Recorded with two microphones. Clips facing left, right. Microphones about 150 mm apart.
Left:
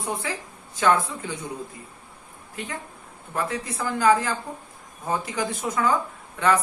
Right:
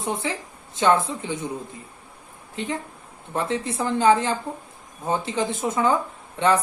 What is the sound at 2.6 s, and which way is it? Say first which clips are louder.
A man's voice: right 5 dB; 25° right (ahead or behind).